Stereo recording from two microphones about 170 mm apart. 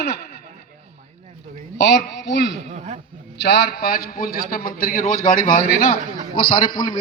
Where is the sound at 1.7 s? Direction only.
80° left.